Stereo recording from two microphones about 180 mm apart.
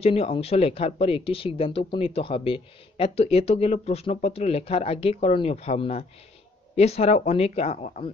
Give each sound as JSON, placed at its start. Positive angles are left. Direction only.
{"t": 0.0, "sound": "speech", "side_deg": 35}